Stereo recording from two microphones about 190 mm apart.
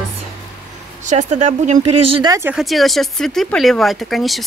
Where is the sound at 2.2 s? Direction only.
15° right (ahead or behind).